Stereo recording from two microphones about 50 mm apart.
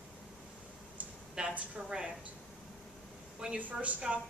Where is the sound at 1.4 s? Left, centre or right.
Centre.